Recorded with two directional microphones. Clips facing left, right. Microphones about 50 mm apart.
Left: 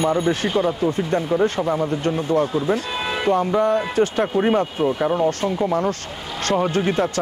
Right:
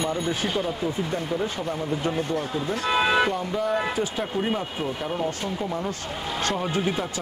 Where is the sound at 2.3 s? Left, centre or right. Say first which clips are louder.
Left 8 dB; left.